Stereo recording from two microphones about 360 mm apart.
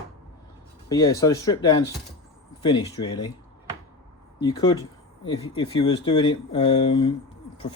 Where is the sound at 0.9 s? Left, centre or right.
Centre.